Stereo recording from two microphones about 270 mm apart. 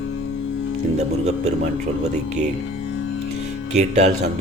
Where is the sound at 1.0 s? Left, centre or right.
Right.